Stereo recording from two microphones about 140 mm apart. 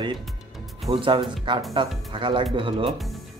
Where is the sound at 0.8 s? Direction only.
40° right (ahead or behind).